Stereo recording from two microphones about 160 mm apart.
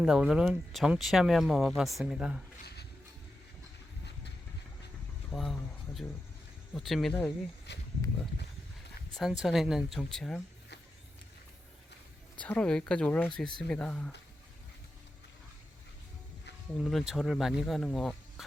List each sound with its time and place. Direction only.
0.0 s speech: 5° right (ahead or behind)
5.3 s speech: centre (ahead or behind)
6.7 s speech: centre (ahead or behind)
7.7 s speech: 90° left
9.1 s speech: centre (ahead or behind)
12.4 s speech: 10° left (ahead or behind)
16.7 s speech: centre (ahead or behind)